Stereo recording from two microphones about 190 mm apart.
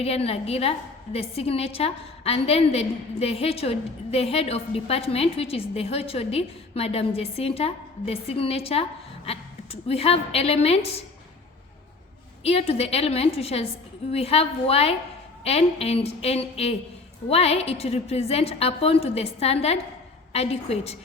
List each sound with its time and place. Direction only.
0.0 s a woman's voice: 30° left (ahead or behind)
12.4 s a woman's voice: 30° left (ahead or behind)